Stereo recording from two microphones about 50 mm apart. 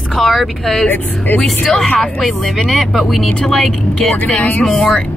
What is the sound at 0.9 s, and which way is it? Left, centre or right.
Speech, left.